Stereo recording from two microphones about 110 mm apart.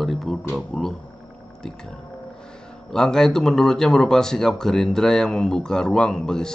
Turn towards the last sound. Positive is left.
turn(degrees=5)  # may be behind; listen again after turning